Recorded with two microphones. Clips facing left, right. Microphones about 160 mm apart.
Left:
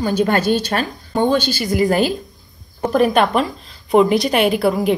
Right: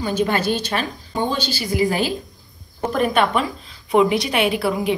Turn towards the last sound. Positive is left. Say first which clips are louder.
# left 4 dB
turn(degrees=40)  # may be behind; listen again after turning